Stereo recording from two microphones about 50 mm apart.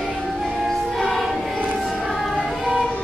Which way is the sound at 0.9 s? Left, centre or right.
Centre.